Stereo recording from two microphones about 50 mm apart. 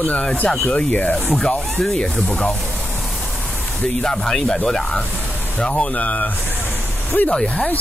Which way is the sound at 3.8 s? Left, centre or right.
Centre.